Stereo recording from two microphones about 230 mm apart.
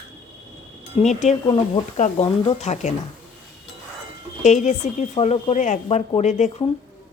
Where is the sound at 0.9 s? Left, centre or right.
Left.